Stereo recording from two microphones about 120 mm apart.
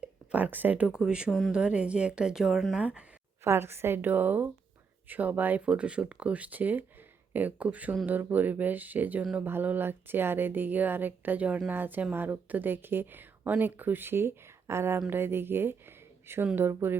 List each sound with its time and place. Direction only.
0.0 s speech: 10° right (ahead or behind)
3.4 s a woman's voice: 20° right (ahead or behind)